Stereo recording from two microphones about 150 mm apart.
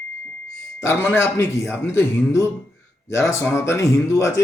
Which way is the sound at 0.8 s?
15° left (ahead or behind).